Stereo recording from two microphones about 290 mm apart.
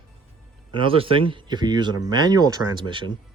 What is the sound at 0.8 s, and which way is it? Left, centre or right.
Speech, centre.